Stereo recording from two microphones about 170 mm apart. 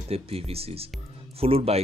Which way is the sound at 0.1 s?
35° right (ahead or behind).